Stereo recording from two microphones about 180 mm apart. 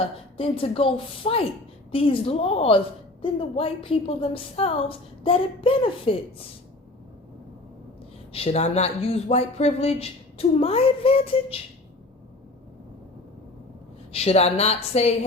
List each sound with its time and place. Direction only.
0.3 s a woman's voice: 30° left (ahead or behind)
8.3 s a woman's voice: 35° left (ahead or behind)
14.1 s a woman's voice: 35° left (ahead or behind)